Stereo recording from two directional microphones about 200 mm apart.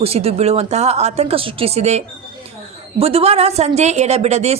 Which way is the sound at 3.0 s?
30° right (ahead or behind).